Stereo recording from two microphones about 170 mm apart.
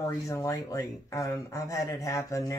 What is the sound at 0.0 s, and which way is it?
Speech, 20° left (ahead or behind).